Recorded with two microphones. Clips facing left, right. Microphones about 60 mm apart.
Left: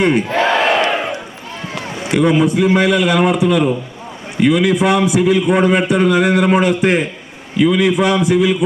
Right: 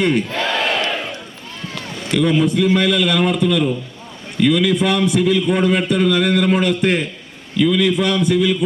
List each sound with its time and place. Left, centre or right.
0.0 s a man's voice: centre
0.3 s battle cry: left
1.7 s run: centre
2.7 s a man's voice: centre
7.5 s a man's voice: left
7.8 s a man's voice: centre